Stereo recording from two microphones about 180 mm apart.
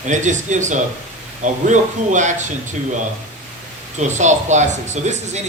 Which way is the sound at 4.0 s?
40° right (ahead or behind).